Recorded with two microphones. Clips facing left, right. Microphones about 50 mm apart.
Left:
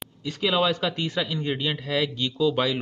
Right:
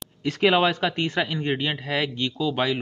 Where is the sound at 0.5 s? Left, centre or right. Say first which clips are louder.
Right 2 dB; right.